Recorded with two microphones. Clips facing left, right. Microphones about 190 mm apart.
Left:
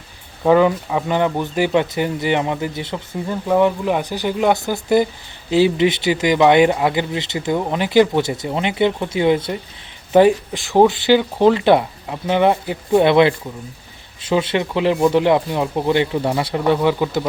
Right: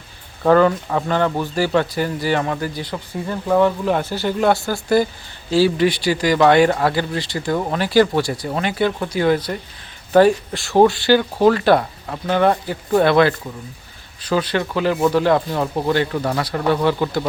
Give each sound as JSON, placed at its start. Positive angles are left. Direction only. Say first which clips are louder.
{"t": 0.4, "sound": "speech", "louder": "even", "side_deg": 10}
{"t": 16.6, "sound": "speech", "louder": "left 1 dB", "side_deg": 15}